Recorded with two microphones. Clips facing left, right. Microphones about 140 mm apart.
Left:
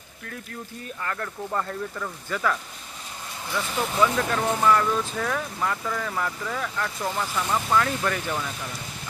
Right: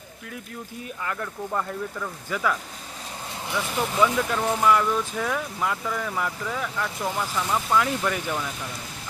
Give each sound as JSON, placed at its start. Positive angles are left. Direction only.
{"t": 1.0, "sound": "speech", "side_deg": -5}